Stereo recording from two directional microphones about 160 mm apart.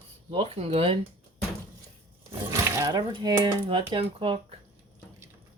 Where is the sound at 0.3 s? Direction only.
35° right (ahead or behind).